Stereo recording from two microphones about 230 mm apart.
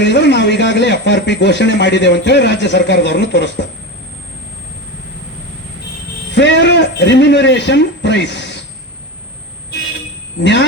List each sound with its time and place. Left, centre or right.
0.0 s speech: left
6.3 s a man's voice: left
10.4 s speech: left